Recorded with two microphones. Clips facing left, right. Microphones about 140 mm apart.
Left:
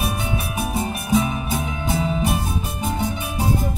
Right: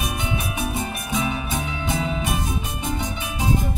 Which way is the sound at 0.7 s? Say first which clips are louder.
Left 6 dB; 35° left (ahead or behind).